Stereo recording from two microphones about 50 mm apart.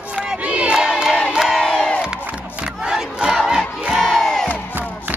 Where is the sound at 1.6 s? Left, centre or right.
Centre.